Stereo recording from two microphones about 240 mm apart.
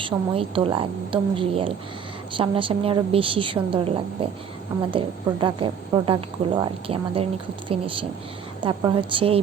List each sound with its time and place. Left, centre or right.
0.0 s a woman's voice: right
8.6 s a woman's voice: right